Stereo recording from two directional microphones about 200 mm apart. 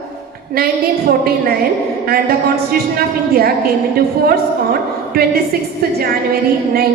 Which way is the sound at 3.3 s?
50° right (ahead or behind).